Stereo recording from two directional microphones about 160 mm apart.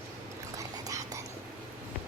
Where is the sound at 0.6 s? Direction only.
20° right (ahead or behind).